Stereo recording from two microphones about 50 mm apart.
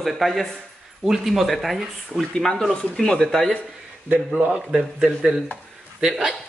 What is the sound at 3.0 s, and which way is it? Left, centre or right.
Speech, centre.